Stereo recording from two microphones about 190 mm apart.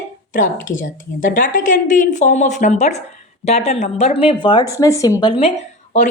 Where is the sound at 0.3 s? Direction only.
45° left (ahead or behind).